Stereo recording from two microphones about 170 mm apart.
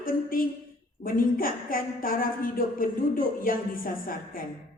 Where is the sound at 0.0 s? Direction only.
55° left (ahead or behind).